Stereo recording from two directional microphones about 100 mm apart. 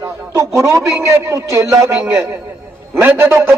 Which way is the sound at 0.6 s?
30° right (ahead or behind).